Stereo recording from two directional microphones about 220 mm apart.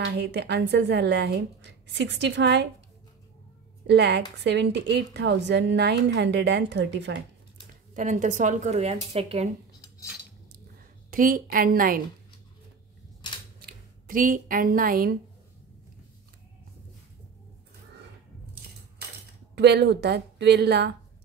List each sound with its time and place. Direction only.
0.0 s a woman's voice: 50° right (ahead or behind)
3.8 s a woman's voice: 50° right (ahead or behind)
7.9 s speech: 35° right (ahead or behind)
11.1 s speech: 40° right (ahead or behind)
13.6 s speech: 40° right (ahead or behind)
19.5 s a woman's voice: 50° right (ahead or behind)